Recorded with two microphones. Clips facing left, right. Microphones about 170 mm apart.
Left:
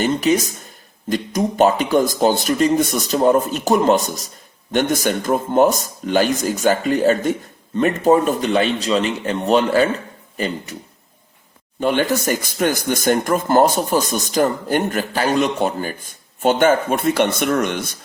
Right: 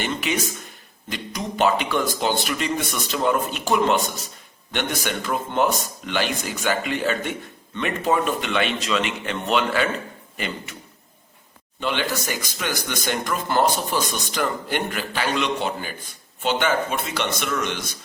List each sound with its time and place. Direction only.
0.0 s speech: 40° left (ahead or behind)
11.8 s speech: 45° left (ahead or behind)